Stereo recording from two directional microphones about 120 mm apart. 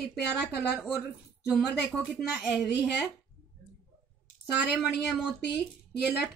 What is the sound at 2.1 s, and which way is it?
Speech, 5° right (ahead or behind).